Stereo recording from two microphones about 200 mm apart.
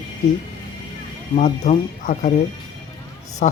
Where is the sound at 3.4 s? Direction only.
35° left (ahead or behind).